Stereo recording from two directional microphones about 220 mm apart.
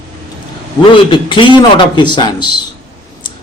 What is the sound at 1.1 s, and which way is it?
Speech, 20° left (ahead or behind).